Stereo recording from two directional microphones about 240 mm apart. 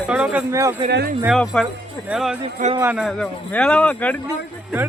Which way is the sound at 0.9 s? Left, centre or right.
Right.